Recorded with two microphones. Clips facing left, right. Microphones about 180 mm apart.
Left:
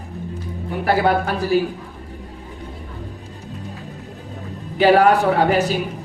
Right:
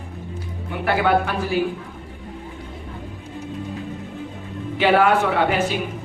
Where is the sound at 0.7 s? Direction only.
40° left (ahead or behind).